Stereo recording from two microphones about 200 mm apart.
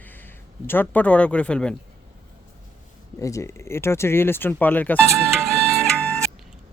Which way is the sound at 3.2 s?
15° left (ahead or behind).